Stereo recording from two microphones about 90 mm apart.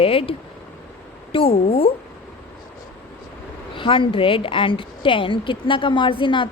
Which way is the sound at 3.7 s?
70° left (ahead or behind).